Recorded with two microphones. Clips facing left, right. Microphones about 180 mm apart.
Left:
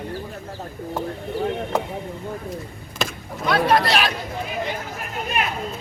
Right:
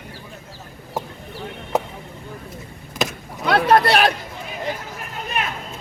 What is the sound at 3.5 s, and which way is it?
Speech, 60° right (ahead or behind).